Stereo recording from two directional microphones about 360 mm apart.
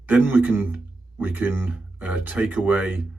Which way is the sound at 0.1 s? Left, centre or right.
Centre.